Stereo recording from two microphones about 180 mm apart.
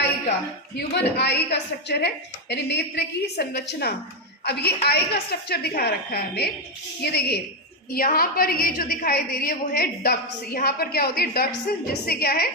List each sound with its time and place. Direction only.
0.8 s a woman's voice: 65° left (ahead or behind)